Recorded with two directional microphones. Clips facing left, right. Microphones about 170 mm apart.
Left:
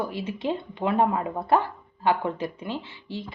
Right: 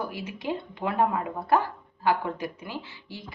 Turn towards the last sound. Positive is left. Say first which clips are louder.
# left 5 dB
turn(degrees=25)  # may be behind; listen again after turning